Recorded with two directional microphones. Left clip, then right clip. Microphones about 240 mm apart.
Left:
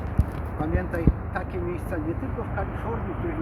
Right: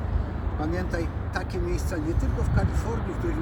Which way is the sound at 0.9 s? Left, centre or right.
Centre.